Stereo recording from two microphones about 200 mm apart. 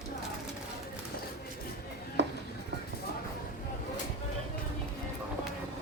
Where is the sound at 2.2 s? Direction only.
60° right (ahead or behind).